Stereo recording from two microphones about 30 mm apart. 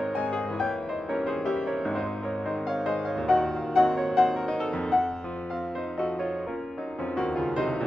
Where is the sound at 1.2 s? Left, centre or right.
Left.